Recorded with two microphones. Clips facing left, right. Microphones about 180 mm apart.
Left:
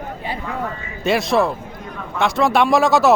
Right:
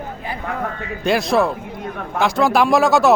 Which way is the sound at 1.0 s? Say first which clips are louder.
Even; centre (ahead or behind).